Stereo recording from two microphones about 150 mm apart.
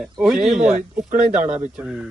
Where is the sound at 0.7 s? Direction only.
55° right (ahead or behind).